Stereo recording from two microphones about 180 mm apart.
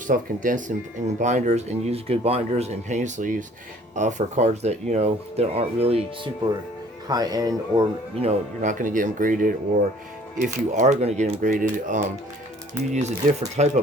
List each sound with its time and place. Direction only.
0.1 s speech: 45° right (ahead or behind)
7.1 s speech: 20° right (ahead or behind)
8.2 s speech: 40° right (ahead or behind)